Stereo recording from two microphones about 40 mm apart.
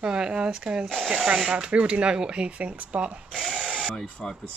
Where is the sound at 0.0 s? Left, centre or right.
Right.